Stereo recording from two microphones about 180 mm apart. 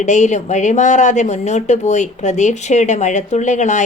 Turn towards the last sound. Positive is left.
turn(degrees=40)  # may be behind; listen again after turning